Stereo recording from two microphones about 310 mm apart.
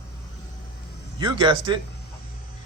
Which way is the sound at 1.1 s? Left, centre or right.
Centre.